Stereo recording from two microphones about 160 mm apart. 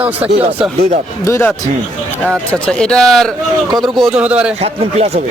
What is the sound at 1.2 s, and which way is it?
Speech, 15° left (ahead or behind).